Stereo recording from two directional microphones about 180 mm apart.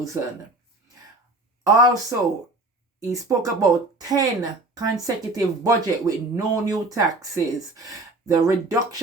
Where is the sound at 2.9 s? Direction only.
20° right (ahead or behind).